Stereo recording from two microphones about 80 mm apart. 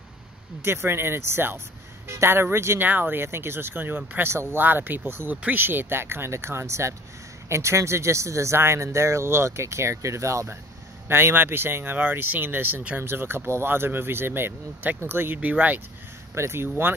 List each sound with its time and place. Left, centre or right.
0.7 s speech: right
16.3 s speech: right